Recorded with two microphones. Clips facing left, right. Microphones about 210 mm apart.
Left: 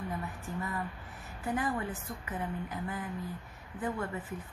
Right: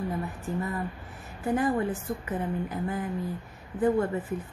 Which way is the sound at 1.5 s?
35° right (ahead or behind).